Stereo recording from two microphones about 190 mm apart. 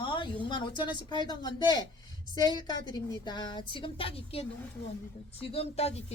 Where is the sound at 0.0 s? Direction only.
25° left (ahead or behind).